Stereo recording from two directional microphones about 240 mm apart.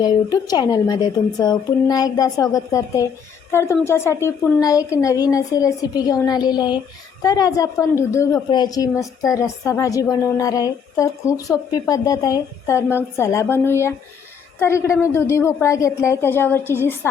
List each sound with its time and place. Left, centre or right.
0.0 s a woman's voice: centre